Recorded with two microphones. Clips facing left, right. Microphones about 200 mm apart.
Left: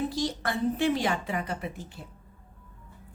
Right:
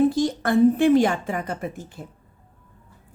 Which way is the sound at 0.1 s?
50° right (ahead or behind).